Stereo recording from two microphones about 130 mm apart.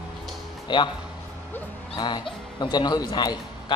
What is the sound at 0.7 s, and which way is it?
Speech, 35° left (ahead or behind).